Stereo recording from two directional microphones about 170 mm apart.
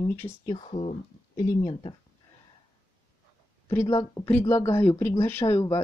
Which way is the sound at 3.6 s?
20° left (ahead or behind).